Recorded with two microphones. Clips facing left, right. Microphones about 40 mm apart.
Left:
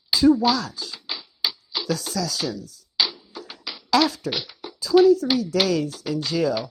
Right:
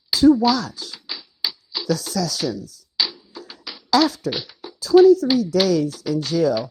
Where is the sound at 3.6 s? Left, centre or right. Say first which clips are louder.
Right 2 dB; left.